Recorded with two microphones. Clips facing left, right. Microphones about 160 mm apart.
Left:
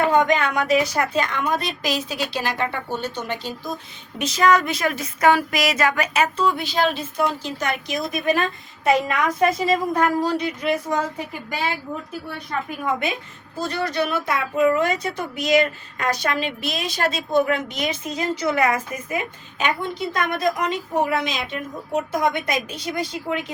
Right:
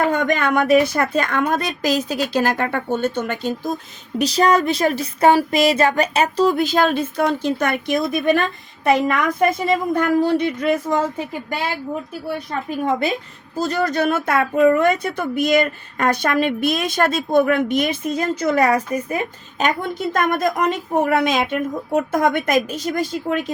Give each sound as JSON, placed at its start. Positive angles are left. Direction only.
{"t": 0.1, "sound": "speech", "side_deg": -55}
{"t": 4.2, "sound": "speech", "side_deg": -35}
{"t": 12.8, "sound": "speech", "side_deg": -35}